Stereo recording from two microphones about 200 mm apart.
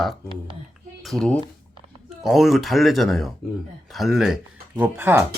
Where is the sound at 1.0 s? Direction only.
Centre (ahead or behind).